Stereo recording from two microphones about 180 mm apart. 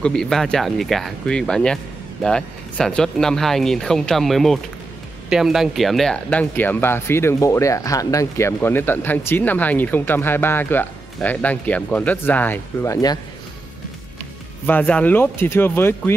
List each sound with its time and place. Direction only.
0.0 s speech: 5° left (ahead or behind); by 13.2 s 20° left (ahead or behind)
14.7 s speech: 10° left (ahead or behind)